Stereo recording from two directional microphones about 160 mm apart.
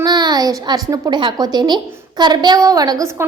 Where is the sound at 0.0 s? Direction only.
25° right (ahead or behind).